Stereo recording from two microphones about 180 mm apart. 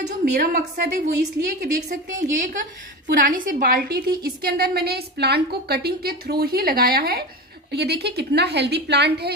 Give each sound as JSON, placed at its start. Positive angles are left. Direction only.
{"t": 0.2, "sound": "a woman's voice", "side_deg": -60}